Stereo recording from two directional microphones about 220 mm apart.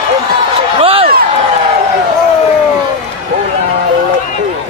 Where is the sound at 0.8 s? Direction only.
25° right (ahead or behind).